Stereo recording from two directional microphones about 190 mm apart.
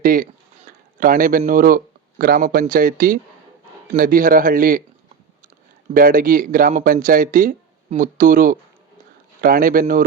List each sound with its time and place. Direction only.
0.0 s a man's voice: 45° right (ahead or behind)
5.9 s a man's voice: 45° right (ahead or behind)